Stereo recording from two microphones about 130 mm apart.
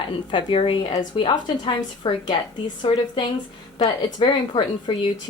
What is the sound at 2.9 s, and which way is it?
Speech, 50° left (ahead or behind).